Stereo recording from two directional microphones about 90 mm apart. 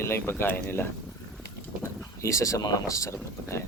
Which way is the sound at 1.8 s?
35° left (ahead or behind).